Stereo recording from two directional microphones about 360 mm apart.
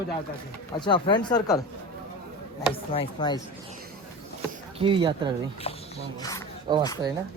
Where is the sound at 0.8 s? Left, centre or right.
Centre.